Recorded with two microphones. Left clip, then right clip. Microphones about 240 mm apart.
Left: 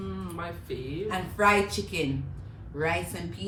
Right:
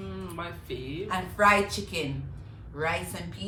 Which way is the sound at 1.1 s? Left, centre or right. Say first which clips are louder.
Right 1 dB; centre.